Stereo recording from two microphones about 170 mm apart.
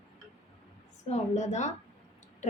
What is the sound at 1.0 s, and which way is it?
Speech, 45° left (ahead or behind).